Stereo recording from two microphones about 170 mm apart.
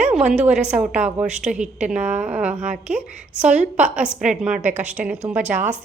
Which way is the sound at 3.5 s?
45° right (ahead or behind).